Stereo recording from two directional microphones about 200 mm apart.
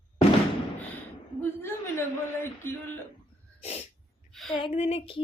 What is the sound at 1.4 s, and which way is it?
A woman's voice, 10° left (ahead or behind).